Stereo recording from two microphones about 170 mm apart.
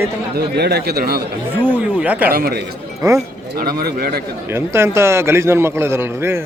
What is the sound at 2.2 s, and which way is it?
Speech, 60° right (ahead or behind).